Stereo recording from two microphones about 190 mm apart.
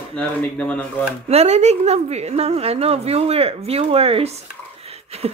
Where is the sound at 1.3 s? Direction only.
35° right (ahead or behind).